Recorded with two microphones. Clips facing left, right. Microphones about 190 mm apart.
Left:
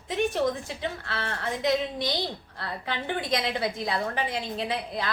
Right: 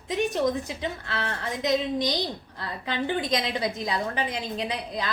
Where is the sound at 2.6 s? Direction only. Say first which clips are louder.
Right 3 dB; 20° right (ahead or behind).